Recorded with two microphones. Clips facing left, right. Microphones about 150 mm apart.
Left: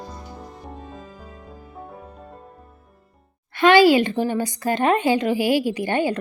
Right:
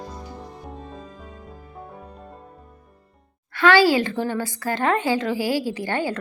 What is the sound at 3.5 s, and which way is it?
A woman's voice, 20° left (ahead or behind).